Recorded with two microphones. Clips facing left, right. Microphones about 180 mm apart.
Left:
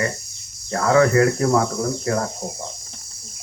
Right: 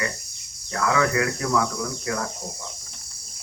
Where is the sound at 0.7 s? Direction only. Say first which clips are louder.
Left 6 dB; 40° left (ahead or behind).